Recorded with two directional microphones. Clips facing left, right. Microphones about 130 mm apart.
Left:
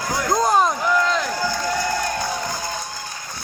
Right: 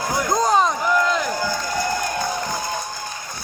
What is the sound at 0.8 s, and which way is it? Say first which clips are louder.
Crowd: even; 5° right (ahead or behind).